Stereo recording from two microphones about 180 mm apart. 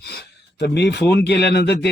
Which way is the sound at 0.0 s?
65° left (ahead or behind).